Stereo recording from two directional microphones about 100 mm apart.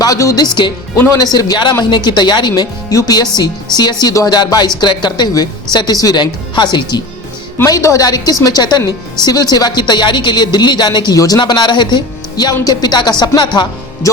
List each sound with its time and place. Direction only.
0.0 s a man's voice: 35° left (ahead or behind)
1.2 s a man's voice: 40° left (ahead or behind)
7.6 s speech: 30° left (ahead or behind); by 13.7 s 50° left (ahead or behind)